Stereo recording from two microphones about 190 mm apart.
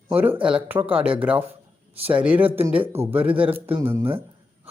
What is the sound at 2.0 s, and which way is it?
Speech, 30° right (ahead or behind).